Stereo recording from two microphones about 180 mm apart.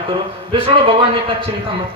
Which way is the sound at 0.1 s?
30° right (ahead or behind).